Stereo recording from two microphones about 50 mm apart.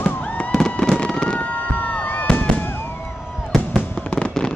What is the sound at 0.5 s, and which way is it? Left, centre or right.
Fireworks, centre.